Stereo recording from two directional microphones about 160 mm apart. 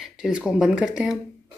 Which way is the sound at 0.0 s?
5° right (ahead or behind).